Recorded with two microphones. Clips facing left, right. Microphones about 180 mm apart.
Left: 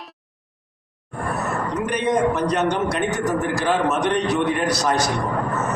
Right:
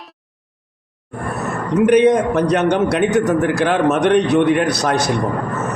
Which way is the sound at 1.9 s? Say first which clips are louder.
Right 7 dB; 65° right (ahead or behind).